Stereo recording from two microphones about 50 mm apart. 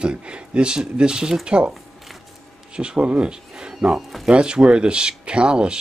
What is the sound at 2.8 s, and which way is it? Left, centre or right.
Speech, centre.